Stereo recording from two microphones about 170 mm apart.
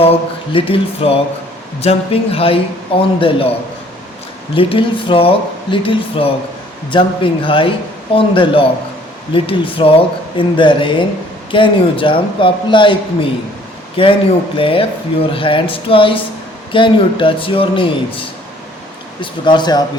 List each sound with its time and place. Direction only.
0.5 s speech: 35° left (ahead or behind)
4.5 s a man's voice: 30° left (ahead or behind)